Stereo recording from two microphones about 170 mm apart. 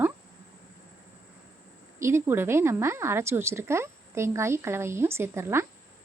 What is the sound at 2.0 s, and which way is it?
A woman's voice, 15° right (ahead or behind).